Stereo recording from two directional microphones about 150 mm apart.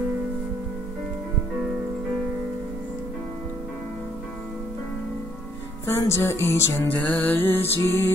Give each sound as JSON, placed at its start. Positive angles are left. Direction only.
{"t": 5.9, "sound": "music", "side_deg": 15}